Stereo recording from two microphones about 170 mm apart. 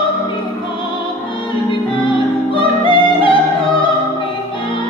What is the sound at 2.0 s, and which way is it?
Music, 30° left (ahead or behind).